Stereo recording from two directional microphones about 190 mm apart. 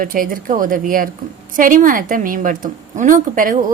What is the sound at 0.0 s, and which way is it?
A woman's voice, 45° right (ahead or behind).